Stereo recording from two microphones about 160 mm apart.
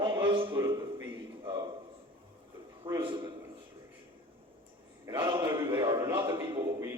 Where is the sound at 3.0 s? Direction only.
30° right (ahead or behind).